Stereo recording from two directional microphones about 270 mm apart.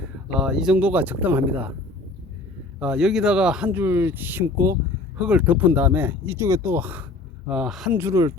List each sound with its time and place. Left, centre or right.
0.3 s speech: centre
2.7 s speech: centre